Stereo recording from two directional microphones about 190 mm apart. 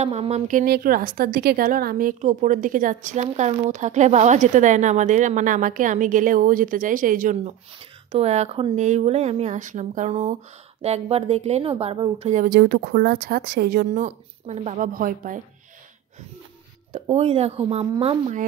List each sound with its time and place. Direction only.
0.0 s a woman's voice: 35° right (ahead or behind); by 14.0 s 55° right (ahead or behind)
14.0 s speech: 35° right (ahead or behind)
16.9 s speech: 35° right (ahead or behind)